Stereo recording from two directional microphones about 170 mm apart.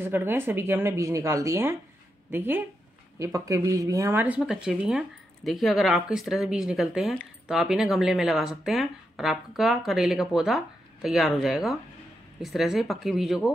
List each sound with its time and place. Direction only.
0.0 s speech: 10° right (ahead or behind)